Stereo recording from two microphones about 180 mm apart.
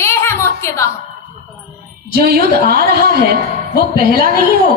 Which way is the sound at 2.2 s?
60° right (ahead or behind).